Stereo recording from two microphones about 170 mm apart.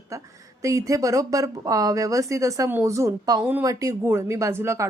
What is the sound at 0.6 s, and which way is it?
A woman's voice, 20° right (ahead or behind).